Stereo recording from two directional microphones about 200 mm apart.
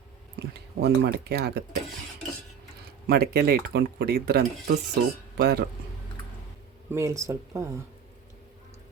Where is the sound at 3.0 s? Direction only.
55° right (ahead or behind).